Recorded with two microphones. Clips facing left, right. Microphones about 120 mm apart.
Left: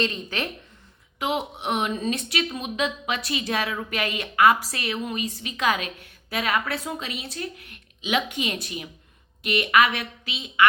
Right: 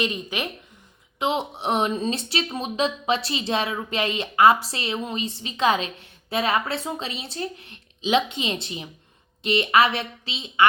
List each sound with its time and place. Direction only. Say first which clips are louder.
0.0 s speech: even; 15° right (ahead or behind)
1.2 s speech: right 2 dB; 30° right (ahead or behind)